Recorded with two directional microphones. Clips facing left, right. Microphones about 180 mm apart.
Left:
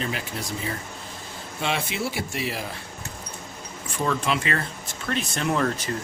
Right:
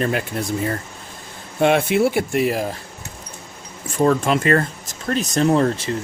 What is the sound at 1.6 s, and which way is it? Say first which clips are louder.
Speech: right 12 dB; 55° right (ahead or behind).